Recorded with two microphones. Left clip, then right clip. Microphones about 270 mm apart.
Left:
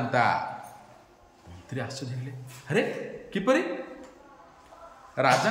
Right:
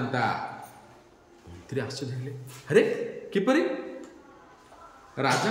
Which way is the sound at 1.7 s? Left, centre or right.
Centre.